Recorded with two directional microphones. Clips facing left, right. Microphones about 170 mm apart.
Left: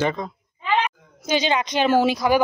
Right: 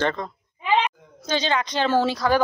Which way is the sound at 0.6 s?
10° right (ahead or behind).